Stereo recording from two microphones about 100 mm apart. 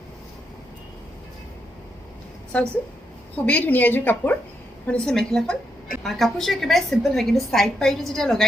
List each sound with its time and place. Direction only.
3.4 s a woman's voice: 15° left (ahead or behind)
4.9 s a woman's voice: 5° left (ahead or behind)